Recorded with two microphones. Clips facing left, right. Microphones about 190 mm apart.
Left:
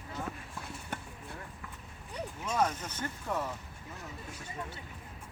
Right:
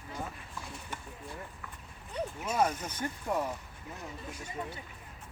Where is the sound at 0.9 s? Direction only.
60° left (ahead or behind).